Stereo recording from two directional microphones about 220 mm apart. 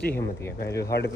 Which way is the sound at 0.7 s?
50° left (ahead or behind).